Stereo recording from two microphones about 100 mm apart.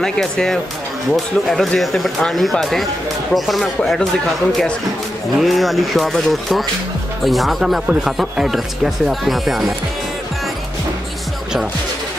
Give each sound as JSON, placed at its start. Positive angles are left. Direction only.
{"t": 0.0, "sound": "speech", "side_deg": 5}